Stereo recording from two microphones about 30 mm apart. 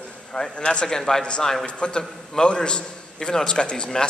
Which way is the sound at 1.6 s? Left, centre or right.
Left.